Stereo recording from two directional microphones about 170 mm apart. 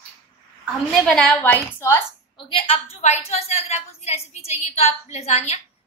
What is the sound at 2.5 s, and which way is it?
A woman's voice, 35° left (ahead or behind).